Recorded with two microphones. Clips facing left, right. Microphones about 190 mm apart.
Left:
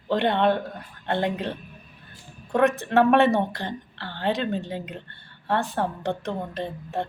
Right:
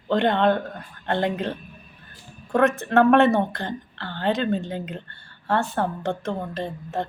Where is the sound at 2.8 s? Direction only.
15° left (ahead or behind).